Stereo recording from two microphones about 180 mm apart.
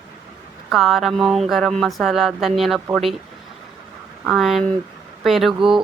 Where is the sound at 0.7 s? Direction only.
Centre (ahead or behind).